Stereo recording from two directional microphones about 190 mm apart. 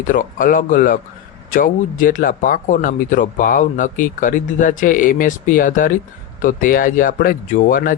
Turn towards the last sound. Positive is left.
turn(degrees=45)  # may be behind; listen again after turning